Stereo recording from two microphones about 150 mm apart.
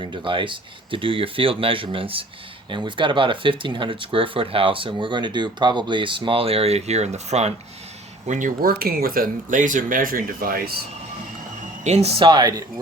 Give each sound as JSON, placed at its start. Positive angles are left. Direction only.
{"t": 0.0, "sound": "speech", "side_deg": -35}
{"t": 8.3, "sound": "speech", "side_deg": -60}
{"t": 11.8, "sound": "speech", "side_deg": -45}